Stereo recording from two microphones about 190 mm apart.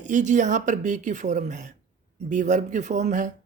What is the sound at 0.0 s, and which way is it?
Speech, 40° right (ahead or behind).